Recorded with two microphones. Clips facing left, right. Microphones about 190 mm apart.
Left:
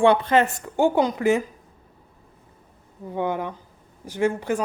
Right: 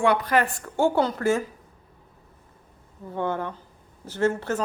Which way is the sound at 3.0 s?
15° left (ahead or behind).